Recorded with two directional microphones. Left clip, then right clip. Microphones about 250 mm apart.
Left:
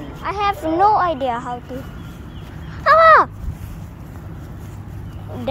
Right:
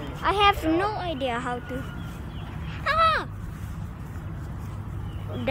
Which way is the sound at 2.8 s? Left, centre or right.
Centre.